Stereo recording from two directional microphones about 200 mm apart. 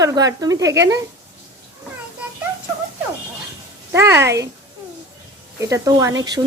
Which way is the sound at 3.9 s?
10° right (ahead or behind).